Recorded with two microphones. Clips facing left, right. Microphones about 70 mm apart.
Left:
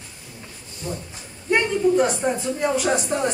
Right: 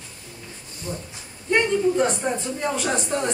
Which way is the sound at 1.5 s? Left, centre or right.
Centre.